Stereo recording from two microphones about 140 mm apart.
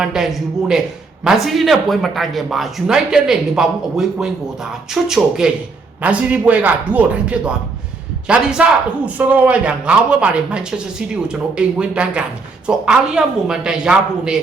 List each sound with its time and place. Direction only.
0.0 s speech: 5° right (ahead or behind)